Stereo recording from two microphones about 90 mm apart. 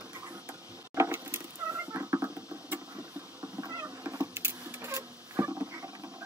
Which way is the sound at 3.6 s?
40° right (ahead or behind).